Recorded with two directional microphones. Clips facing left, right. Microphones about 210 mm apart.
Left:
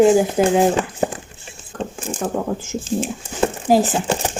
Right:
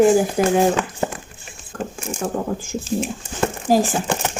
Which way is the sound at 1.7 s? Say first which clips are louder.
Left 1 dB; 30° left (ahead or behind).